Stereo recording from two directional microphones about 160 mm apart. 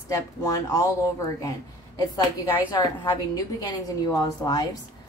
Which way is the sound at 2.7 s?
25° left (ahead or behind).